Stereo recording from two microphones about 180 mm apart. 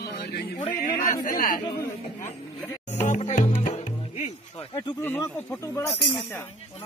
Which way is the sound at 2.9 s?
40° left (ahead or behind).